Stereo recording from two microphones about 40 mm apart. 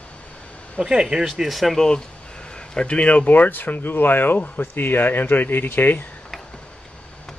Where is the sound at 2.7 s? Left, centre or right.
Left.